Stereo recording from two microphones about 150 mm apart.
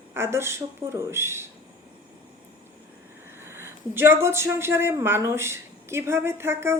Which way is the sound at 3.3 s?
15° right (ahead or behind).